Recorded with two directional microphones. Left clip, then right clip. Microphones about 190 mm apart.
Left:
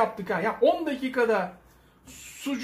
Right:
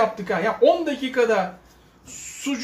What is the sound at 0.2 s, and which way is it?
Speech, 25° left (ahead or behind).